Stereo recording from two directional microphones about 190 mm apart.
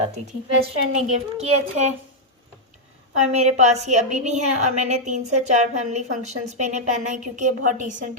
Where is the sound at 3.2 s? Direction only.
35° right (ahead or behind).